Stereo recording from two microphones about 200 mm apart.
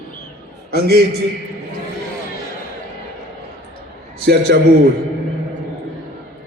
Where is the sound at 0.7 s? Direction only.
50° right (ahead or behind).